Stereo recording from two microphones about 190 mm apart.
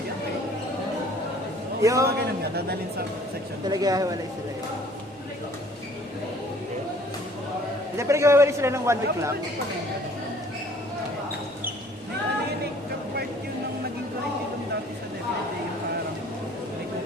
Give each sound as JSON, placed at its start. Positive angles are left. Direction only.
{"t": 1.8, "sound": "a man's voice", "side_deg": -15}
{"t": 2.0, "sound": "a man's voice", "side_deg": -55}
{"t": 3.7, "sound": "a woman's voice", "side_deg": -20}
{"t": 7.9, "sound": "a man's voice", "side_deg": -15}